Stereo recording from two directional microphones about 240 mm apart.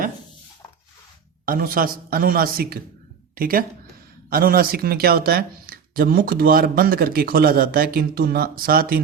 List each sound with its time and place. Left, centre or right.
1.5 s speech: right